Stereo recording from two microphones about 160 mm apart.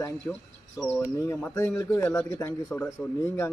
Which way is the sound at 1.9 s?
20° left (ahead or behind).